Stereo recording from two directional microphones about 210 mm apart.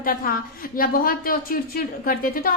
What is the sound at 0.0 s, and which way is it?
A woman's voice, 45° left (ahead or behind).